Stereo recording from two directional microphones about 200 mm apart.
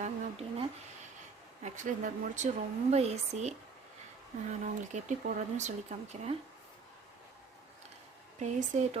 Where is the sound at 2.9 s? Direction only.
35° right (ahead or behind).